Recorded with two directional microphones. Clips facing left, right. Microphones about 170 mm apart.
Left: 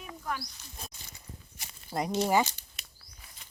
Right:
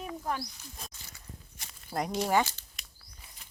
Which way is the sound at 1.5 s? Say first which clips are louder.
Even; 5° left (ahead or behind).